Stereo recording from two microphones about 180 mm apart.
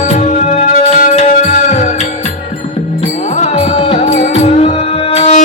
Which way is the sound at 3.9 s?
40° left (ahead or behind).